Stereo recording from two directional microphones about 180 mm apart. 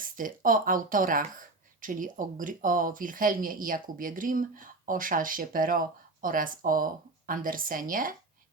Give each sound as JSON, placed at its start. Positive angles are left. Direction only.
{"t": 0.0, "sound": "speech", "side_deg": -50}